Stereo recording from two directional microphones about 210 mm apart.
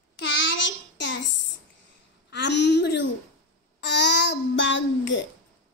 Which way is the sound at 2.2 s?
55° left (ahead or behind).